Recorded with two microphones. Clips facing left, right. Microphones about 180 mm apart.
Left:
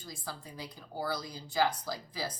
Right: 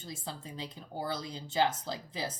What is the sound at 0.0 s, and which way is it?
Speech, 25° right (ahead or behind).